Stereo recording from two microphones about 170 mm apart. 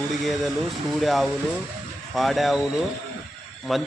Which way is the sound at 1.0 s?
Centre (ahead or behind).